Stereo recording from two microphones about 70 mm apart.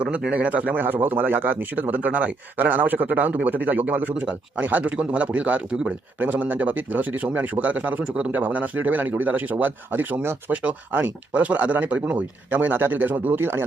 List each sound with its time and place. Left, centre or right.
0.0 s speech: centre